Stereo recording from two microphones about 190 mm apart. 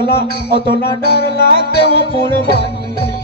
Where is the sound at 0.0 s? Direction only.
60° left (ahead or behind).